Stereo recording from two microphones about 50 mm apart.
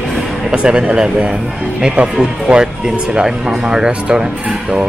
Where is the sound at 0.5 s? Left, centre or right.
Centre.